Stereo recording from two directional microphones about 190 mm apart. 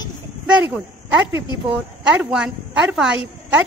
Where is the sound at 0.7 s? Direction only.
5° right (ahead or behind).